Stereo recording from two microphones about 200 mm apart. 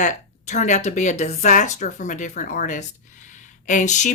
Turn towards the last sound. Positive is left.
turn(degrees=35)  # may be behind; listen again after turning